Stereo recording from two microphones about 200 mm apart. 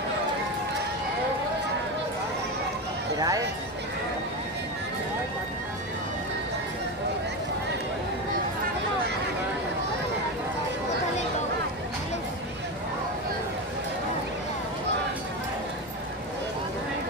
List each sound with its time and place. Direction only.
3.2 s speech: 15° right (ahead or behind)